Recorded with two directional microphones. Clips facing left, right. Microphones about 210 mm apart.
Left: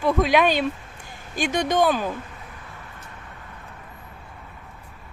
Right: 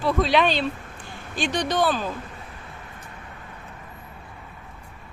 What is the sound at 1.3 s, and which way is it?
Speech, 50° left (ahead or behind).